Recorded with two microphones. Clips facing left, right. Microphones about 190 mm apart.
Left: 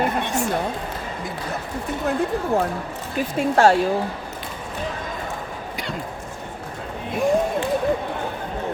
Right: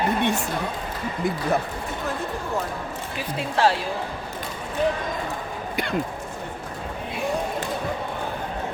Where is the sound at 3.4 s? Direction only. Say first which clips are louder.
Left 6 dB; 45° left (ahead or behind).